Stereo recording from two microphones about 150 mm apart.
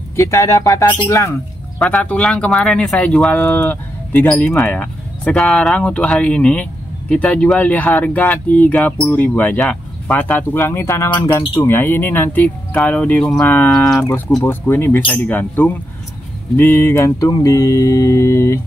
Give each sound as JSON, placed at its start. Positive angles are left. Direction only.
{"t": 0.1, "sound": "mantra", "side_deg": 20}
{"t": 1.8, "sound": "speech", "side_deg": 5}
{"t": 16.5, "sound": "mantra", "side_deg": 15}